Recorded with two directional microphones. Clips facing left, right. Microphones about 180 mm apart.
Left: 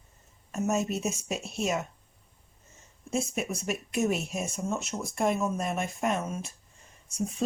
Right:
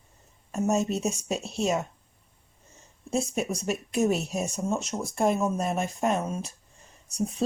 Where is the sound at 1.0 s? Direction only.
35° right (ahead or behind).